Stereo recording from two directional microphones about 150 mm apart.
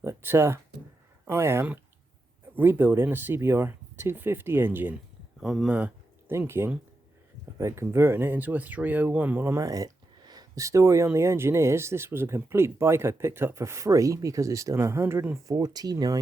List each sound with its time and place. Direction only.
0.0 s speech: 15° right (ahead or behind)
15.5 s speech: 25° right (ahead or behind)